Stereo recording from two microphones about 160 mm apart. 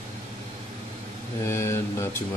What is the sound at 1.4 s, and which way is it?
Mantra, 15° left (ahead or behind).